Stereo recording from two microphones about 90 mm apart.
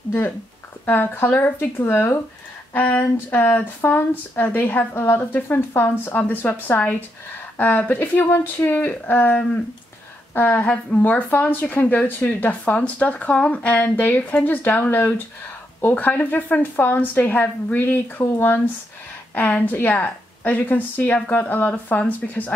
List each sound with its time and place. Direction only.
0.8 s a woman's voice: 20° left (ahead or behind)